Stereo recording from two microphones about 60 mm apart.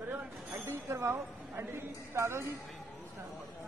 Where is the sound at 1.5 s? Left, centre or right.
Right.